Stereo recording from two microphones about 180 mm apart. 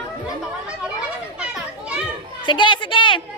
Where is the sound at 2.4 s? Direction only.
25° left (ahead or behind).